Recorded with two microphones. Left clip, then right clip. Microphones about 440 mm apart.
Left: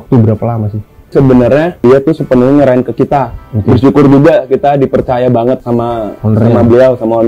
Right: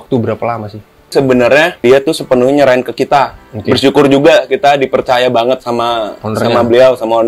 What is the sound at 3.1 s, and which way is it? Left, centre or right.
Speech, centre.